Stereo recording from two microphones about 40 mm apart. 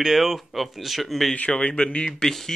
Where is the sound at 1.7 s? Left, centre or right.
Left.